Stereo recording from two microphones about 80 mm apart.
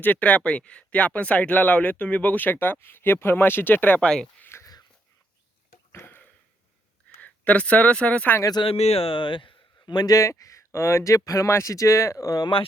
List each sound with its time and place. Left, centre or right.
0.0 s speech: centre
4.4 s a sound: left
5.9 s a sound: left
7.2 s speech: centre
8.4 s speech: left
9.1 s speech: left
10.2 s speech: left